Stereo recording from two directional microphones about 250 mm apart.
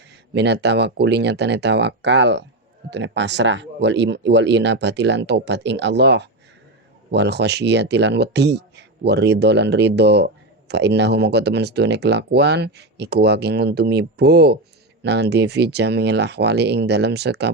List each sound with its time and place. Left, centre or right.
0.3 s speech: right